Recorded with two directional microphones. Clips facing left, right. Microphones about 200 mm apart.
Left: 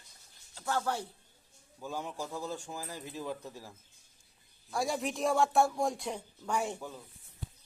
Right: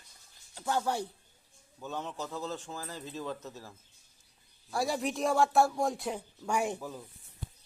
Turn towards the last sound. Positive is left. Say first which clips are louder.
# right 2 dB
turn(degrees=-10)  # may be behind; listen again after turning